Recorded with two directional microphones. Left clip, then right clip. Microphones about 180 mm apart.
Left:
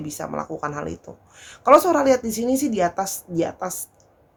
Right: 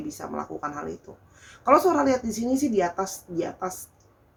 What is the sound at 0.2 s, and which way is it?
Speech, 60° left (ahead or behind).